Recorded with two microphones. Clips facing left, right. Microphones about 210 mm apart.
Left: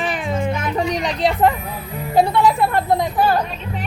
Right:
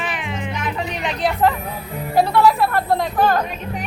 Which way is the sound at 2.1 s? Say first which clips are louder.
Even; 20° left (ahead or behind).